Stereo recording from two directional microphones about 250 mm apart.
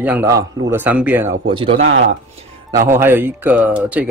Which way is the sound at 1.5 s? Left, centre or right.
Right.